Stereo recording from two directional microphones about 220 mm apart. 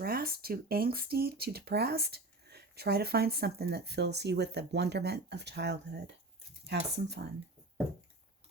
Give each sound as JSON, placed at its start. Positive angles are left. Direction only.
{"t": 0.0, "sound": "speech", "side_deg": -40}